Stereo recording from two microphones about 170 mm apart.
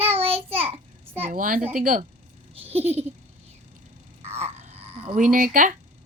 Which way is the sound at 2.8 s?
10° right (ahead or behind).